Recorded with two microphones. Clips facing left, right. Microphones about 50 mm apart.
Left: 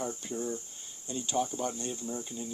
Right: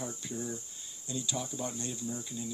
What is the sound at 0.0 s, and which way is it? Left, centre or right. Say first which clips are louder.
Speech: left 4 dB; left.